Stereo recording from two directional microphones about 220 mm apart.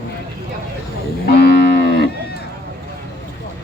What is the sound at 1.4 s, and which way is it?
Cattle, 50° left (ahead or behind).